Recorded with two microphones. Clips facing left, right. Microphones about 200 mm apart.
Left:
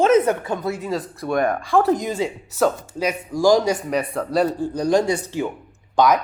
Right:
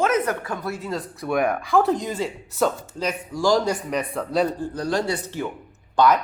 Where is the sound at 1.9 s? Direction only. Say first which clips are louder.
Left 3 dB; 10° left (ahead or behind).